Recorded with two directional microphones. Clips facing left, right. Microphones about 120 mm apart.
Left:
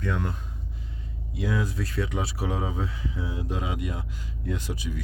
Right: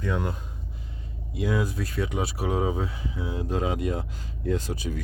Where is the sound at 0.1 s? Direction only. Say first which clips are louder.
Right 2 dB; 10° right (ahead or behind).